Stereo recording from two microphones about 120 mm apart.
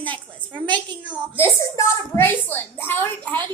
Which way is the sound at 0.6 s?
40° right (ahead or behind).